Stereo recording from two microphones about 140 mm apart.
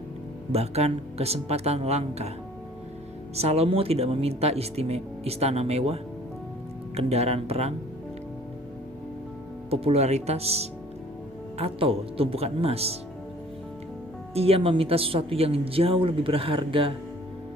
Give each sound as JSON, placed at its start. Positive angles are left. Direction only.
{"t": 0.5, "sound": "speech", "side_deg": -50}
{"t": 3.3, "sound": "speech", "side_deg": -45}
{"t": 9.6, "sound": "speech", "side_deg": -45}
{"t": 14.3, "sound": "speech", "side_deg": -45}